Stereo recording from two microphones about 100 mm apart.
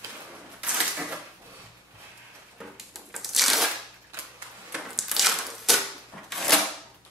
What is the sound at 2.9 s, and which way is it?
Crushing, centre (ahead or behind).